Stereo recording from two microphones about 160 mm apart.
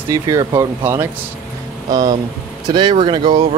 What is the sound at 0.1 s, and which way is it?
Speech, 20° right (ahead or behind).